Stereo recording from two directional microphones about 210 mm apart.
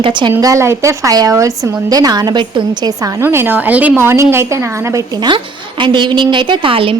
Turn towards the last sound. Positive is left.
turn(degrees=-25)  # may be behind; listen again after turning